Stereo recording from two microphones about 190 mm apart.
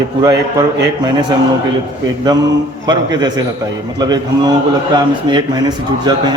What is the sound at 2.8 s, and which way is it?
Speech, 20° right (ahead or behind).